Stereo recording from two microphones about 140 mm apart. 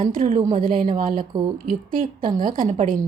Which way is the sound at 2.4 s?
75° right (ahead or behind).